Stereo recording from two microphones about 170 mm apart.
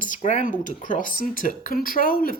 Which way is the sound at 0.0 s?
45° left (ahead or behind).